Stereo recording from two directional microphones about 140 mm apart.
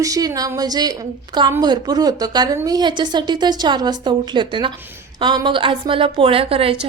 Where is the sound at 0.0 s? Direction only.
25° right (ahead or behind).